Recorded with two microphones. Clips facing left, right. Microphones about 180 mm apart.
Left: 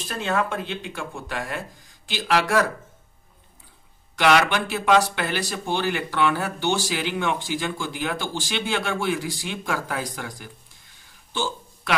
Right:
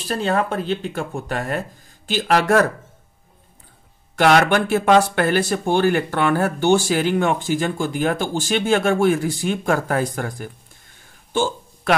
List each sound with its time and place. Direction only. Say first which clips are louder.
0.1 s speech: right 5 dB; 35° right (ahead or behind)
4.2 s speech: right 4 dB; 50° right (ahead or behind)
11.3 s a sound: right 7 dB; 50° right (ahead or behind)